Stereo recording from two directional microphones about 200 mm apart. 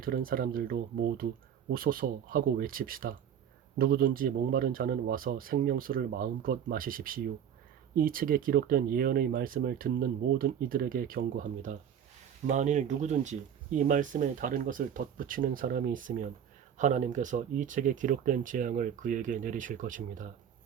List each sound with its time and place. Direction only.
0.0 s speech: 45° right (ahead or behind)